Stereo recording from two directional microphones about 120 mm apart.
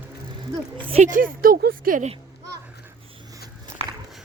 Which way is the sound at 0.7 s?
45° right (ahead or behind).